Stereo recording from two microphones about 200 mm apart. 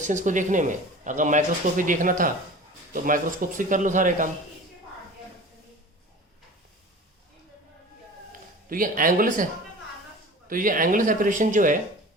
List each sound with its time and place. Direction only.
0.0 s speech: 40° right (ahead or behind)
8.7 s speech: 45° right (ahead or behind)
10.5 s speech: 45° right (ahead or behind)